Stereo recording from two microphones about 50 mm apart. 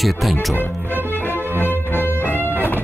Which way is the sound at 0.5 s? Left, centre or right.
Left.